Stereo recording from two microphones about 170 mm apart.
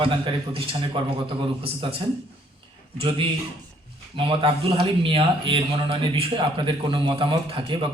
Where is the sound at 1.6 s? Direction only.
35° right (ahead or behind).